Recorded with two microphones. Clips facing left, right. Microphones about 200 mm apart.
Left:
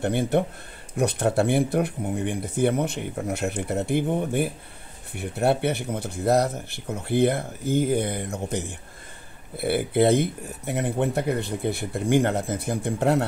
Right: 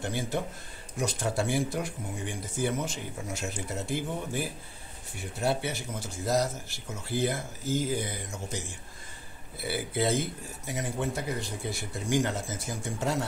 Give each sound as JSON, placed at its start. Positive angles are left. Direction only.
{"t": 0.0, "sound": "speech", "side_deg": 60}